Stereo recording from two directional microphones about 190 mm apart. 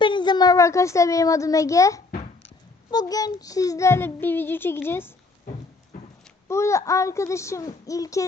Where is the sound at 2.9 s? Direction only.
20° left (ahead or behind).